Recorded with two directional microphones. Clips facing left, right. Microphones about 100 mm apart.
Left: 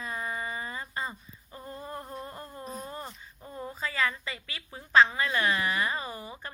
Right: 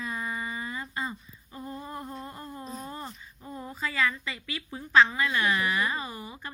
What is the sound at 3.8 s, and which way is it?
A woman's voice, 30° left (ahead or behind).